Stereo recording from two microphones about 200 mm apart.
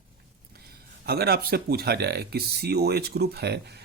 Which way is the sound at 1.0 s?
50° right (ahead or behind).